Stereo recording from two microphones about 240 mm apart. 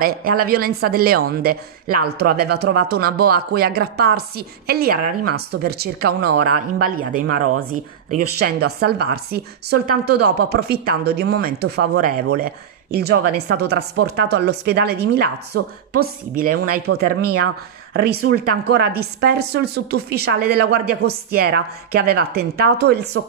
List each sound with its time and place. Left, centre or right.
0.0 s speech: right
18.3 s speech: right